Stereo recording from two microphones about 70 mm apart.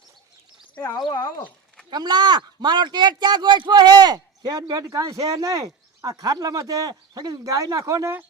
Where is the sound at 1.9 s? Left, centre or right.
Right.